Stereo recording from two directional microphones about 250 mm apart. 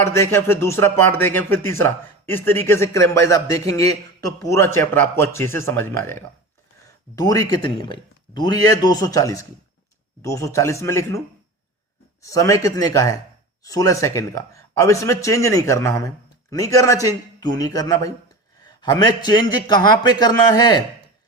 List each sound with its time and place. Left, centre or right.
0.0 s speech: centre
12.2 s speech: centre